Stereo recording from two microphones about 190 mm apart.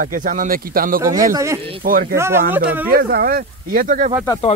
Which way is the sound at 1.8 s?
50° right (ahead or behind).